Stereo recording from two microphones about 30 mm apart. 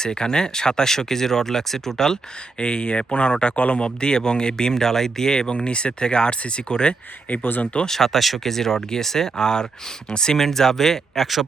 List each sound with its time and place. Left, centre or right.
0.0 s speech: left
2.6 s speech: left
7.9 s speech: centre; by 10.3 s left
10.3 s speech: centre